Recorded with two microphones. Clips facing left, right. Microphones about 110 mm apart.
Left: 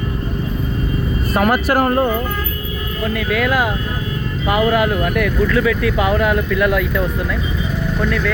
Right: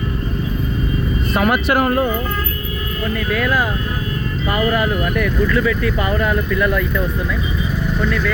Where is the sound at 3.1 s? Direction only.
75° left (ahead or behind).